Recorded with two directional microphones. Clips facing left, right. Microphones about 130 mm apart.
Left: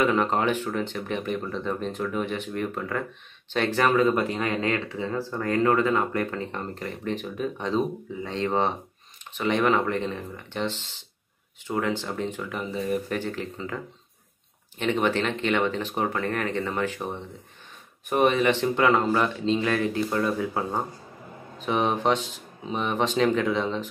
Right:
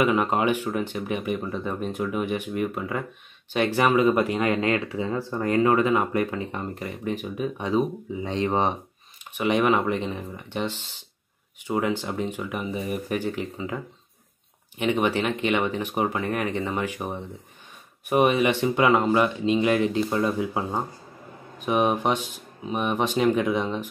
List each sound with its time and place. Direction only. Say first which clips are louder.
0.0 s speech: right 1 dB; 10° right (ahead or behind)
14.8 s speech: right 1 dB; 15° right (ahead or behind)